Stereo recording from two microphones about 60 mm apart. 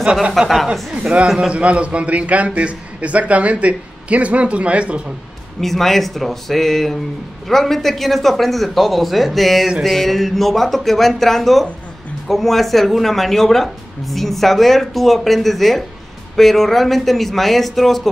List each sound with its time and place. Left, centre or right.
0.0 s speech: centre
0.3 s speech: centre
1.5 s a man's voice: right
5.6 s speech: centre